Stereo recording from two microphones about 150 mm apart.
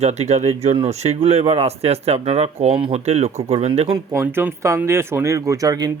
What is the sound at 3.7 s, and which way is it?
Speech, 30° right (ahead or behind).